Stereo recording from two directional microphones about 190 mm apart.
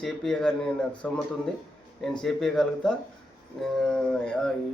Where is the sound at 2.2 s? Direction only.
5° left (ahead or behind).